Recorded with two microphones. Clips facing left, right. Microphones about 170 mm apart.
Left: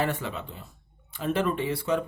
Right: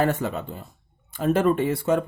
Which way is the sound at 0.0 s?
45° right (ahead or behind).